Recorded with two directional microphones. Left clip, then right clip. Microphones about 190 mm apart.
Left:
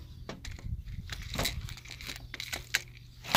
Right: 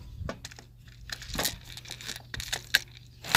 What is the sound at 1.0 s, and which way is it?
Crumpling, 15° right (ahead or behind).